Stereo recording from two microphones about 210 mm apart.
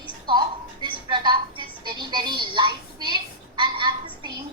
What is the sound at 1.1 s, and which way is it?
Speech, 20° right (ahead or behind).